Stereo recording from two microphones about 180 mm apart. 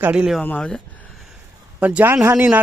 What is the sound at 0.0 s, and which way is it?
Speech, 5° right (ahead or behind).